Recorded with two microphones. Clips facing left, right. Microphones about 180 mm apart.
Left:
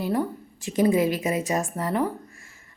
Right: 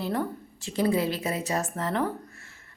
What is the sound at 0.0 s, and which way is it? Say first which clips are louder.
A woman's voice: left 3 dB; 10° left (ahead or behind).